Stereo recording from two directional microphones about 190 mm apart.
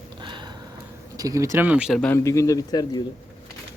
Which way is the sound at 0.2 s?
25° right (ahead or behind).